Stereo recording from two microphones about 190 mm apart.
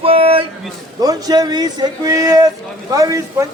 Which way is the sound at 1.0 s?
20° right (ahead or behind).